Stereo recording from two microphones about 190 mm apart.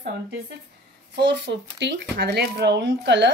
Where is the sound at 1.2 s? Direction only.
70° right (ahead or behind).